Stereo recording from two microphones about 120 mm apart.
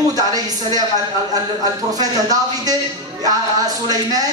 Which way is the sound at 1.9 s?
30° right (ahead or behind).